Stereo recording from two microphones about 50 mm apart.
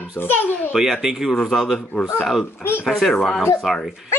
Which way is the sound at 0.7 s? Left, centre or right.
Centre.